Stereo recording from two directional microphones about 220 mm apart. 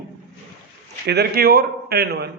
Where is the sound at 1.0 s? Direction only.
45° right (ahead or behind).